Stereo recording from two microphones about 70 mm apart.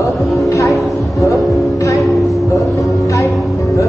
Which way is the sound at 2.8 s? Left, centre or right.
Left.